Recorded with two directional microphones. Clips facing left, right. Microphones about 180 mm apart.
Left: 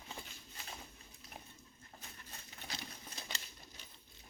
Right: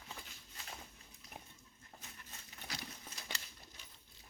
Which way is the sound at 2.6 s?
25° left (ahead or behind).